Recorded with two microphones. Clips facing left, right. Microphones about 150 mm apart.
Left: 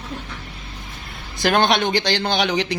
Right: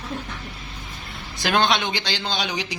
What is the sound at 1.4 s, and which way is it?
Speech, 55° left (ahead or behind).